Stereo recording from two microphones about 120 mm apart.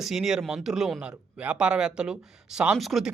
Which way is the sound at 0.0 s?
5° right (ahead or behind).